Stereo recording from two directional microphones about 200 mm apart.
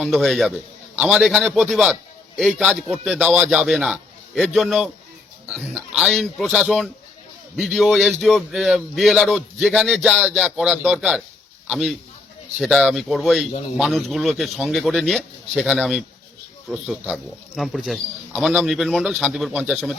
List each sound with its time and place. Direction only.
0.0 s a man's voice: centre (ahead or behind)